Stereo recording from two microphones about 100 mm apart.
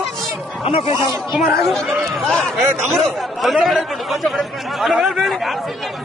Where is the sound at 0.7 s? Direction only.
65° left (ahead or behind).